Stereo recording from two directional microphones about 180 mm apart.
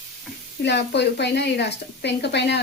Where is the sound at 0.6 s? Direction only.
70° left (ahead or behind).